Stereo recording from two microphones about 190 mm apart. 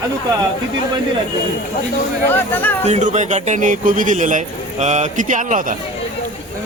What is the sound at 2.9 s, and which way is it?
A man's voice, 40° right (ahead or behind).